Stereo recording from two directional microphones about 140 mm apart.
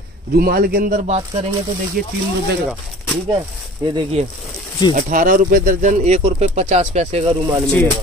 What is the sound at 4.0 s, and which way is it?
Speech, 45° right (ahead or behind).